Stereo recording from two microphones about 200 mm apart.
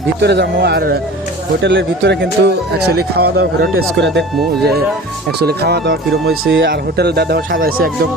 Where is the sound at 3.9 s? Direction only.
65° right (ahead or behind).